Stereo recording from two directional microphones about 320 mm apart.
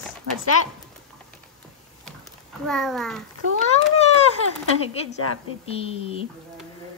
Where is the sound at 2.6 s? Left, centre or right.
Centre.